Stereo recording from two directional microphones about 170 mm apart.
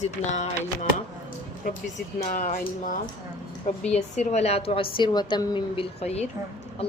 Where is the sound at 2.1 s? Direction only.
50° left (ahead or behind).